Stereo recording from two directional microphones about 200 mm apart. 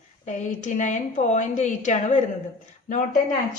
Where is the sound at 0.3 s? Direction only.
40° left (ahead or behind).